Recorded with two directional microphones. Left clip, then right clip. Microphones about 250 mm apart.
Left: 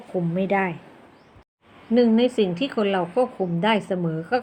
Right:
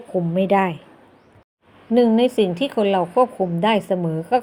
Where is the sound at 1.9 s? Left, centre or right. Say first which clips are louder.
Right 3 dB; centre.